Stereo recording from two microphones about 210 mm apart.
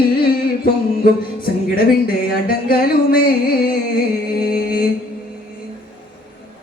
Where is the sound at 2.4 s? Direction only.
45° left (ahead or behind).